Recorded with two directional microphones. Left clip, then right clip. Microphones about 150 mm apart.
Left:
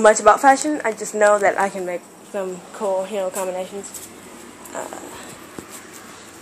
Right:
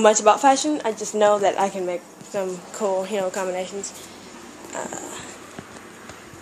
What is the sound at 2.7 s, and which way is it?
Speech, 35° right (ahead or behind).